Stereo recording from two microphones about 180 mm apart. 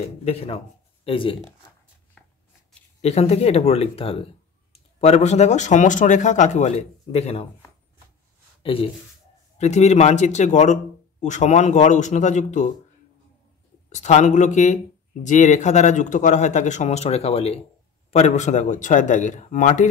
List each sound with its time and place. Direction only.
0.0 s speech: 35° left (ahead or behind)
2.2 s a sound: 5° left (ahead or behind)
3.0 s speech: 35° left (ahead or behind)
8.6 s speech: 30° left (ahead or behind)
13.8 s a man's voice: 40° left (ahead or behind)